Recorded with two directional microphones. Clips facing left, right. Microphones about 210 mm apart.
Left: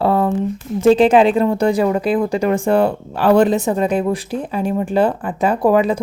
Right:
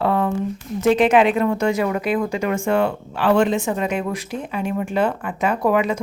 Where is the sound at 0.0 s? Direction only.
35° left (ahead or behind).